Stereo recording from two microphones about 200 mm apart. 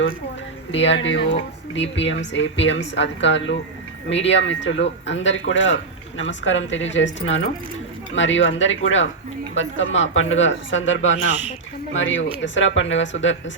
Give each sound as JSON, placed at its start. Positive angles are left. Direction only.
{"t": 0.7, "sound": "a man's voice", "side_deg": 65}